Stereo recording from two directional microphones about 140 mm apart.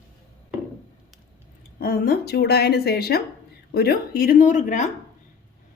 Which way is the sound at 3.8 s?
90° left.